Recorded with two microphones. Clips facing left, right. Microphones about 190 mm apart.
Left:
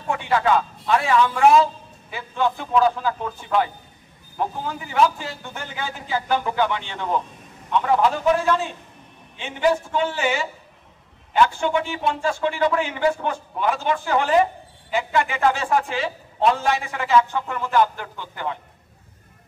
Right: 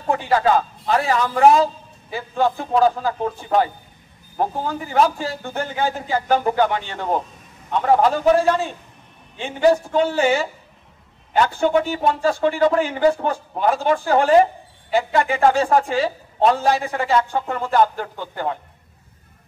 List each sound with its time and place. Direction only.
0.1 s a man's voice: 35° right (ahead or behind)